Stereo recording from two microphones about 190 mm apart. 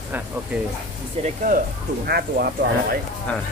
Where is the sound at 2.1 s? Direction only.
55° right (ahead or behind).